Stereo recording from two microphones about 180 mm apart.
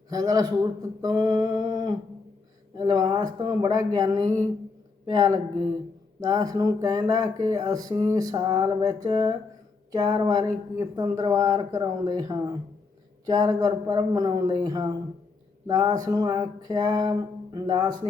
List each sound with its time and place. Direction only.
0.1 s speech: 20° right (ahead or behind)